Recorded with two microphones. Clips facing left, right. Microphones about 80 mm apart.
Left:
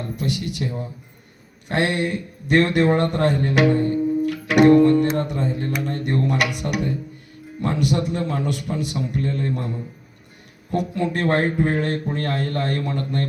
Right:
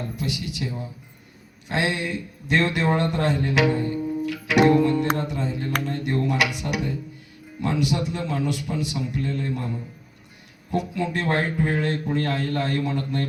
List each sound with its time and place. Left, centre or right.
0.2 s a man's voice: left